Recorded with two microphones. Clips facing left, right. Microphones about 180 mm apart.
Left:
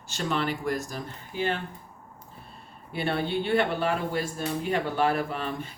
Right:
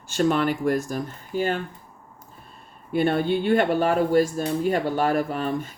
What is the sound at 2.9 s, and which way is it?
Speech, 45° right (ahead or behind).